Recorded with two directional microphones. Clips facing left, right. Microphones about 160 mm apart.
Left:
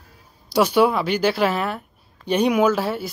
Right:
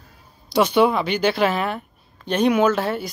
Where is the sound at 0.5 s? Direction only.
10° left (ahead or behind).